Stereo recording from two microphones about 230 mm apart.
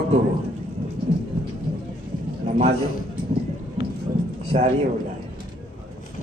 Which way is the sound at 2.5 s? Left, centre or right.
Right.